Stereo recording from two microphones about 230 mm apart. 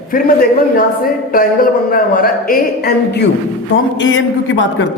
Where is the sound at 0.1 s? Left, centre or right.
Left.